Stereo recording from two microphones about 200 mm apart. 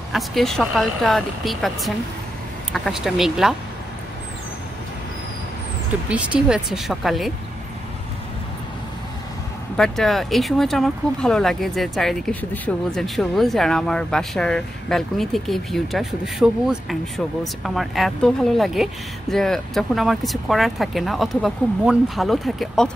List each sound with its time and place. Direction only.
0.1 s speech: centre (ahead or behind)
6.0 s speech: 5° right (ahead or behind)
9.8 s speech: centre (ahead or behind)